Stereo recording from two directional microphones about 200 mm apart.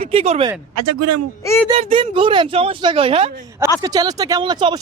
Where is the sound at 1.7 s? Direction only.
30° right (ahead or behind).